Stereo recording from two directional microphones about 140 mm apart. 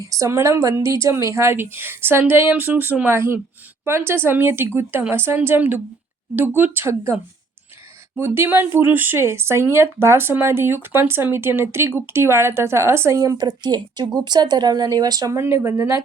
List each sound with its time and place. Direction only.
0.0 s a woman's voice: 25° right (ahead or behind)
8.2 s speech: 15° right (ahead or behind)